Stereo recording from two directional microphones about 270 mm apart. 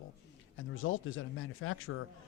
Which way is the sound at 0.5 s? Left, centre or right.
Left.